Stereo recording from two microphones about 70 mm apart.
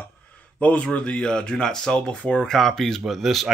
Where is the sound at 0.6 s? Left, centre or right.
Centre.